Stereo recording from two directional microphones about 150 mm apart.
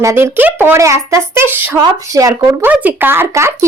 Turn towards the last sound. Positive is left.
turn(degrees=-15)  # may be behind; listen again after turning